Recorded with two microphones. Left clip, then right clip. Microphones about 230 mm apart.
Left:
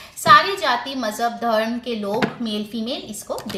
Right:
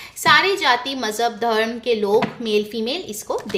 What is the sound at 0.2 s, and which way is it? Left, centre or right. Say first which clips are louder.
A woman's voice: left 2 dB; right.